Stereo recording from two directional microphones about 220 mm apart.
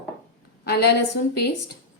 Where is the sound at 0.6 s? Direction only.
45° left (ahead or behind).